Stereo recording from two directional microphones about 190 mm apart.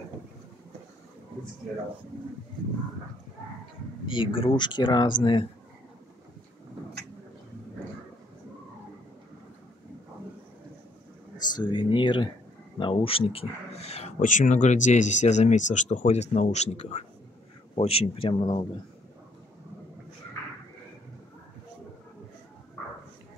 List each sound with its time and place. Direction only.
4.0 s speech: 25° left (ahead or behind)
11.5 s speech: 25° left (ahead or behind)